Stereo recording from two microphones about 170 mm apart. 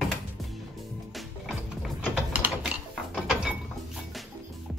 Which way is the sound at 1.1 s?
Centre (ahead or behind).